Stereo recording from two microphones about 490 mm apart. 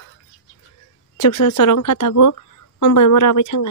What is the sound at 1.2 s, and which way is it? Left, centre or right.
Speech, left.